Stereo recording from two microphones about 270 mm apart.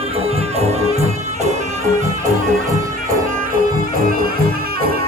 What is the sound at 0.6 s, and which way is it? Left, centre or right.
Music, right.